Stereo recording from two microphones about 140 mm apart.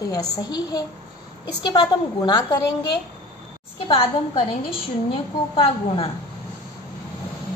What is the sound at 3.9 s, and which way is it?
Speech, 40° left (ahead or behind).